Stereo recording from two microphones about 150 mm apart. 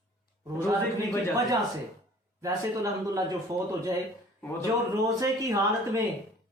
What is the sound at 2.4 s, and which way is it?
Speech, 20° right (ahead or behind).